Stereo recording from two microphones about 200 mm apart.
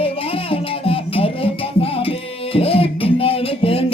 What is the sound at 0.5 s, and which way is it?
Music, 30° left (ahead or behind).